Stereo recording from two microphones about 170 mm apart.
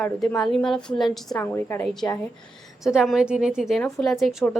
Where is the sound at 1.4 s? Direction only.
15° left (ahead or behind).